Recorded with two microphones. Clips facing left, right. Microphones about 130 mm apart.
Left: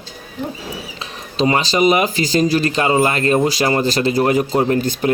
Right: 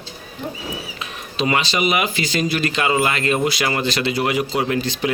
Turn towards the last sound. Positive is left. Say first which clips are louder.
# left 4 dB
turn(degrees=40)  # may be behind; listen again after turning